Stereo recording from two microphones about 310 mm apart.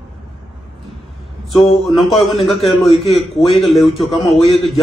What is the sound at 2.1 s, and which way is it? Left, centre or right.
Speech, centre.